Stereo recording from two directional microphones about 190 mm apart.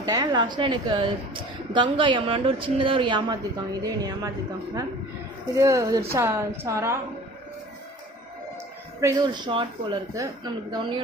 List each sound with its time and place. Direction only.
0.0 s a woman's voice: 20° right (ahead or behind)
5.6 s a woman's voice: 15° right (ahead or behind)
9.0 s a woman's voice: 20° right (ahead or behind)